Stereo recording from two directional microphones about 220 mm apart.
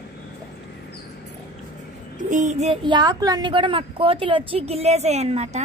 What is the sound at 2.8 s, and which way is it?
A woman's voice, 20° right (ahead or behind).